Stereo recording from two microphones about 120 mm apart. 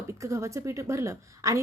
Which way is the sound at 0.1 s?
25° right (ahead or behind).